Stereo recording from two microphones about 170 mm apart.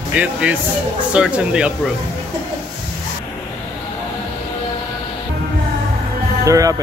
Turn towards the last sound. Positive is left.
turn(degrees=-20)  # may be behind; listen again after turning